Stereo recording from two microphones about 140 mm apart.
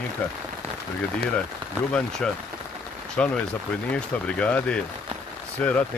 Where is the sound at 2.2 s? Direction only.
5° left (ahead or behind).